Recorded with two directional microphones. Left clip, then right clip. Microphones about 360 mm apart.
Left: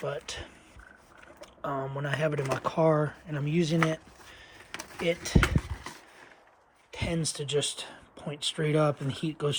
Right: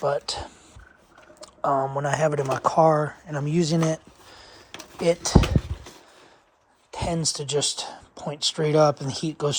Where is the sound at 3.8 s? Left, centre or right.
Right.